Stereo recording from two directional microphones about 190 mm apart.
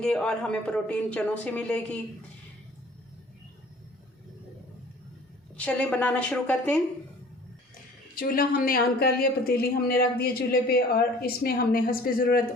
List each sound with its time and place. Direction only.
0.0 s speech: 5° left (ahead or behind)
5.5 s a woman's voice: 5° left (ahead or behind)
8.1 s a man's voice: 50° left (ahead or behind)